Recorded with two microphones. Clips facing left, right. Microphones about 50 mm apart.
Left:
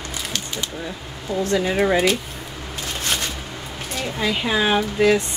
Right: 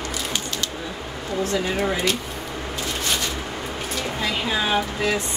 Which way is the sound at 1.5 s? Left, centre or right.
Left.